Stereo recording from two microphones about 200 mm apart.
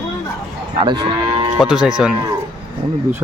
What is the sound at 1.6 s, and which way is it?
Speech, 5° right (ahead or behind).